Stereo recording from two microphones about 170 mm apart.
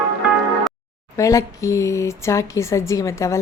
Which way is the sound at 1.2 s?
20° left (ahead or behind).